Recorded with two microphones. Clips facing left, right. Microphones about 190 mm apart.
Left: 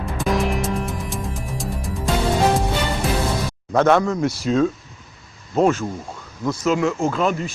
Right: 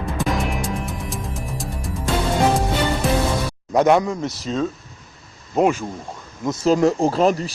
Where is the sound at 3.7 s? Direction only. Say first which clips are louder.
Even; 15° right (ahead or behind).